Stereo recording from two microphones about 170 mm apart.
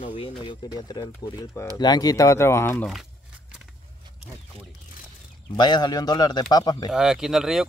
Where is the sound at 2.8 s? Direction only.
Centre (ahead or behind).